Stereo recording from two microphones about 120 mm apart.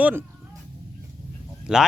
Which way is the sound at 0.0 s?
20° right (ahead or behind).